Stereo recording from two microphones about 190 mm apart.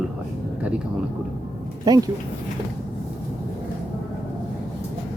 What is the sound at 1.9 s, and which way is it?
Speech, 20° right (ahead or behind).